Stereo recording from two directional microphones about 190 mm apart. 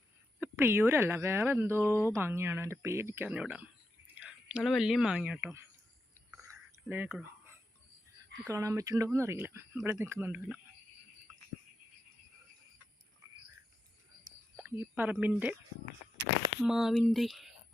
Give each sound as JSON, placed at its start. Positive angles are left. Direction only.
{"t": 0.3, "sound": "speech", "side_deg": -10}
{"t": 6.3, "sound": "a sound", "side_deg": -10}
{"t": 8.4, "sound": "speech", "side_deg": -15}
{"t": 14.5, "sound": "a woman's voice", "side_deg": -10}
{"t": 16.6, "sound": "speech", "side_deg": 0}